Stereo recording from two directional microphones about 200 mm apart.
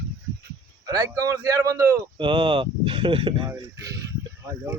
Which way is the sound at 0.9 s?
20° right (ahead or behind).